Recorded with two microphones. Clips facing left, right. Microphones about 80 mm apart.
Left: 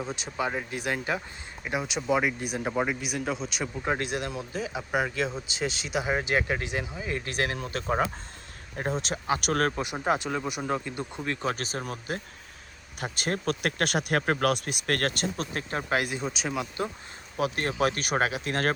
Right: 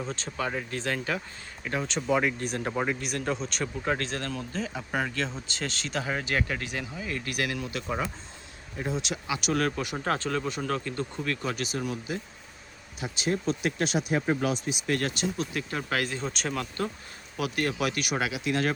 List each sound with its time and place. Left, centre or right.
0.0 s speech: centre
3.8 s speech: centre; by 9.7 s left
9.7 s speech: centre
11.4 s speech: left
15.7 s speech: left
17.3 s speech: left